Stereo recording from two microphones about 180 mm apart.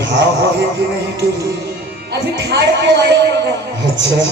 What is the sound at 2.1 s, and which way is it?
Music, 70° right (ahead or behind).